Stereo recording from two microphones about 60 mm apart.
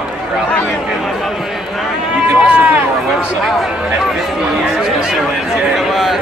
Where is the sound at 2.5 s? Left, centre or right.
Right.